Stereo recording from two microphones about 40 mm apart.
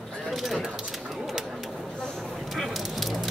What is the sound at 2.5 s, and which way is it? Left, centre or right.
Spray, centre.